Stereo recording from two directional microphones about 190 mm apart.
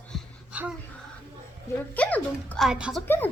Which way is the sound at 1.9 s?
10° left (ahead or behind).